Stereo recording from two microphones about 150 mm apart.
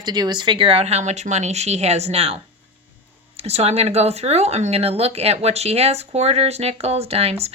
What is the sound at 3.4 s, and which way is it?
Speech, 45° right (ahead or behind).